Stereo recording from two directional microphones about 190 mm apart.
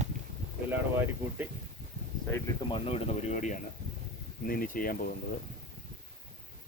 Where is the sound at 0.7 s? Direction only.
10° right (ahead or behind).